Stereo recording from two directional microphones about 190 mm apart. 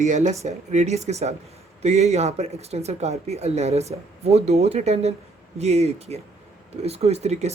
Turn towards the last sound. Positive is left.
turn(degrees=-35)  # may be behind; listen again after turning